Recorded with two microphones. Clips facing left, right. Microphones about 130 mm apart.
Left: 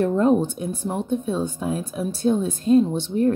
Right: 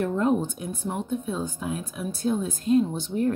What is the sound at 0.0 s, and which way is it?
Speech, 25° left (ahead or behind).